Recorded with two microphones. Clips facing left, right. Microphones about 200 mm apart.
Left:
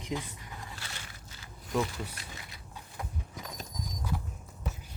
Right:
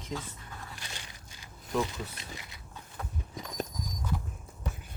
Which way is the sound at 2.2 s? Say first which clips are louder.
Right 3 dB; 20° right (ahead or behind).